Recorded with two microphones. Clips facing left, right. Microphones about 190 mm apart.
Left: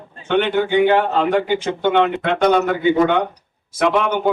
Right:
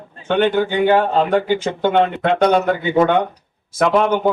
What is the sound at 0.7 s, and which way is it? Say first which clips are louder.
A man's voice: even; 45° right (ahead or behind).